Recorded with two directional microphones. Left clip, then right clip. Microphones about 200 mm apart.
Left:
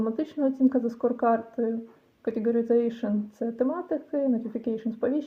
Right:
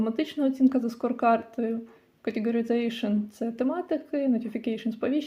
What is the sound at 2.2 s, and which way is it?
Speech, 15° left (ahead or behind).